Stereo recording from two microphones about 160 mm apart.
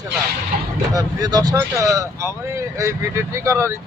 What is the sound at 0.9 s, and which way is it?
Speech, 25° right (ahead or behind).